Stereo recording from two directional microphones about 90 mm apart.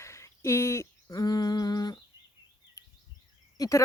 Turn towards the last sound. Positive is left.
turn(degrees=40)  # may be behind; listen again after turning